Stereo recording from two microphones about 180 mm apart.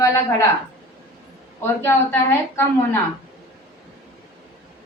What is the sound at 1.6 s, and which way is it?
Speech, 15° left (ahead or behind).